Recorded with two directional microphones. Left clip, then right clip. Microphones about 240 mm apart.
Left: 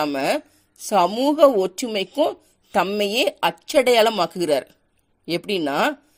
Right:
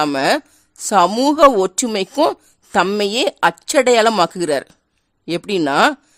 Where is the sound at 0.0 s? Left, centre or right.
Right.